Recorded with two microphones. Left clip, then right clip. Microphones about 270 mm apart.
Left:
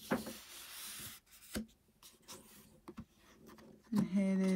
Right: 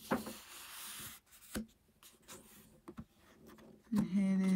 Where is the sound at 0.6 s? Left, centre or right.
Centre.